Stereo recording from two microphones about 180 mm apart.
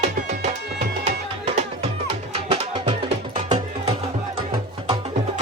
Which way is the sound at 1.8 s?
30° right (ahead or behind).